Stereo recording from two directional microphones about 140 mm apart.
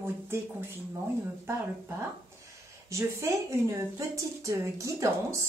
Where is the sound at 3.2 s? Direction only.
25° right (ahead or behind).